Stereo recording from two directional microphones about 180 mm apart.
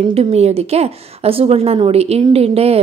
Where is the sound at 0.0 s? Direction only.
35° right (ahead or behind).